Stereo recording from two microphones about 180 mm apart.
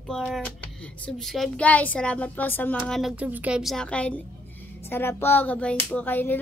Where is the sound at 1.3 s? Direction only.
5° left (ahead or behind).